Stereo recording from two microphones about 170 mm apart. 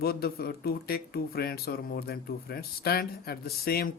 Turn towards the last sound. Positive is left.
turn(degrees=65)  # may be behind; listen again after turning